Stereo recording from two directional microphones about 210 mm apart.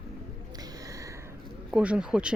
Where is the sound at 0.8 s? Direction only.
15° right (ahead or behind).